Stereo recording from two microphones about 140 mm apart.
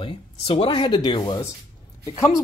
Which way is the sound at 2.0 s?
20° left (ahead or behind).